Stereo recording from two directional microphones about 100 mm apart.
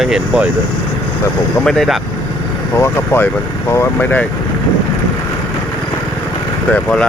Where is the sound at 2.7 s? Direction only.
25° left (ahead or behind).